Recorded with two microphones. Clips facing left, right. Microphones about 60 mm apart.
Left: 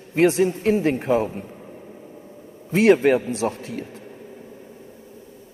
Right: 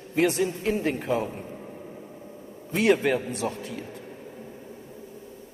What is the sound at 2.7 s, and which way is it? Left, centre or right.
A man's voice, left.